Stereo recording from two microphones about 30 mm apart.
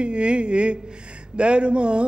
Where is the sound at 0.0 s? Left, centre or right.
Right.